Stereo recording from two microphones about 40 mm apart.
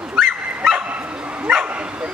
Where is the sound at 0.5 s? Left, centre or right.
Right.